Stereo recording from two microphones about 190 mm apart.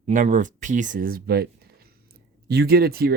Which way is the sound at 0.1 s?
45° right (ahead or behind).